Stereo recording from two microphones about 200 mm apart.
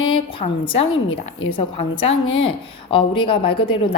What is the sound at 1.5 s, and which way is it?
A woman's voice, 30° left (ahead or behind).